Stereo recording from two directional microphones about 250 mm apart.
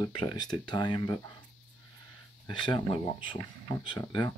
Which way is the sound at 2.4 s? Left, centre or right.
Centre.